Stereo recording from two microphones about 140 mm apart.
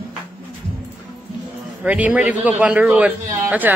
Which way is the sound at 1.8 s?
10° right (ahead or behind).